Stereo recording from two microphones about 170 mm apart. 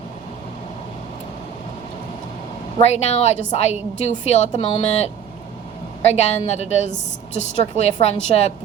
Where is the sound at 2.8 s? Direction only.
40° left (ahead or behind).